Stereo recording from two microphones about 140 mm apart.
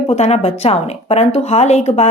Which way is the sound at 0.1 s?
50° left (ahead or behind).